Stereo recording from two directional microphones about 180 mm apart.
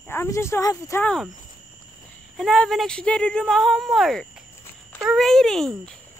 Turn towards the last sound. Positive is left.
turn(degrees=0)  # may be behind; listen again after turning